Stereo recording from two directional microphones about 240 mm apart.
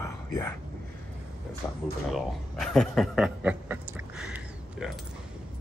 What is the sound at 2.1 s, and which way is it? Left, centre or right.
Chuckle, centre.